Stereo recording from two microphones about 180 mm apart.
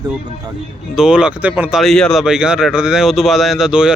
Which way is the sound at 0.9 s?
5° right (ahead or behind).